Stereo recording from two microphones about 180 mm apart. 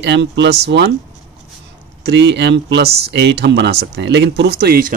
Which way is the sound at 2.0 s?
70° right (ahead or behind).